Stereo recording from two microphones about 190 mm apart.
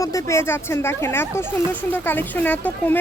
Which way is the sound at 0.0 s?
15° left (ahead or behind).